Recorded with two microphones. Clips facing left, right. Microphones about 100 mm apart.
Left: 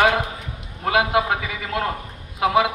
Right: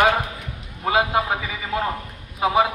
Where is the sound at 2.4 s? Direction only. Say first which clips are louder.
Left 1 dB; 90° left.